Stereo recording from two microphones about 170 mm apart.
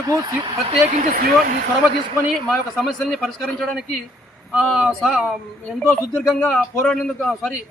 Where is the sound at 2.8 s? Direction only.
Centre (ahead or behind).